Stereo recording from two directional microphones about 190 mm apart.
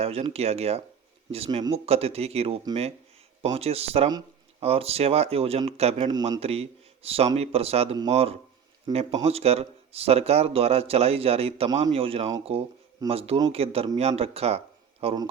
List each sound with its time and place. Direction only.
0.0 s speech: 30° right (ahead or behind)
15.0 s speech: 20° right (ahead or behind)